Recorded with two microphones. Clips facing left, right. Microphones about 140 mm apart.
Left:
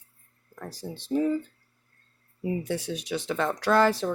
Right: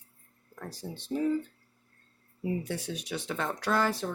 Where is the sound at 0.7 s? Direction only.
90° left.